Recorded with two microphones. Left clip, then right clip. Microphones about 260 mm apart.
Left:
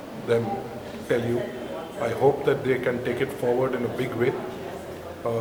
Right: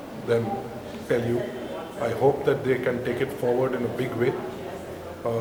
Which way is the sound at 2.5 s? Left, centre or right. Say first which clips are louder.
Even; centre.